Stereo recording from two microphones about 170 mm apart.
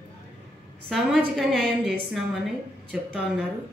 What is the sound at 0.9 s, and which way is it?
A woman's voice, centre (ahead or behind).